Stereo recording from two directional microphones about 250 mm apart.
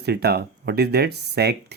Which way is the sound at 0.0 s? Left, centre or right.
Right.